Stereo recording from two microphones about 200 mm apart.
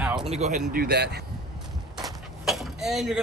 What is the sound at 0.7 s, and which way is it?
Speech, 50° right (ahead or behind).